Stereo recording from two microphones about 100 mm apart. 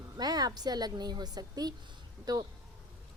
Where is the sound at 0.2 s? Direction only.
40° right (ahead or behind).